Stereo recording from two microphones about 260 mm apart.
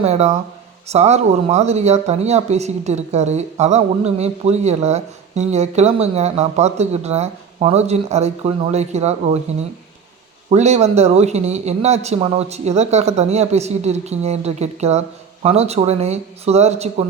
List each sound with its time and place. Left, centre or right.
0.0 s speech: right